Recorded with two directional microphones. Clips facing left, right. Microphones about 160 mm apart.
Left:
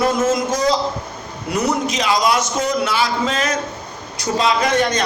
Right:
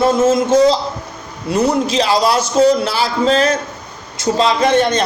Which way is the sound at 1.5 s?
30° right (ahead or behind).